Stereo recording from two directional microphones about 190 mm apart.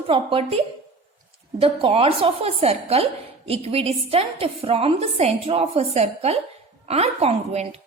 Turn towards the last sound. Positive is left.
turn(degrees=-35)  # may be behind; listen again after turning